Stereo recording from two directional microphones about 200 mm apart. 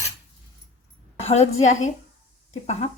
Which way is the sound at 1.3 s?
35° left (ahead or behind).